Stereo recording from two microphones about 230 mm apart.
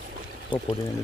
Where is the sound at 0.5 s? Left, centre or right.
Centre.